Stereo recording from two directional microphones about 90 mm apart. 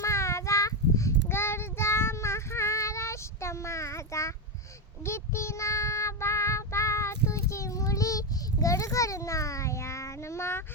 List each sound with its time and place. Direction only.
0.0 s child singing: 35° left (ahead or behind)